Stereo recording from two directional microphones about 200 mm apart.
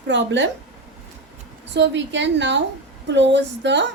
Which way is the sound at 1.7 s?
65° right (ahead or behind).